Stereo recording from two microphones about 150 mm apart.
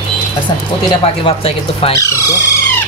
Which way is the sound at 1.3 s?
35° left (ahead or behind).